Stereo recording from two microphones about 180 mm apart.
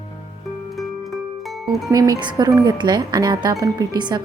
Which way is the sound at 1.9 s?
20° right (ahead or behind).